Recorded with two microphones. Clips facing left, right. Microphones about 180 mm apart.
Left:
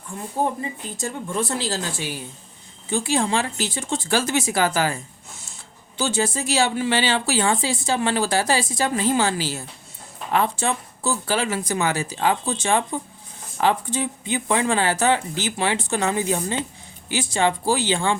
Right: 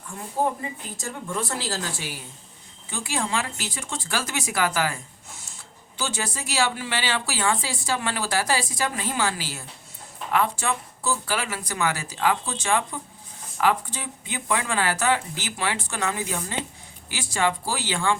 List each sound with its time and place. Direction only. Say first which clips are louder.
0.9 s speech: left 5 dB; 20° left (ahead or behind)
6.0 s speech: left 7 dB; 25° left (ahead or behind)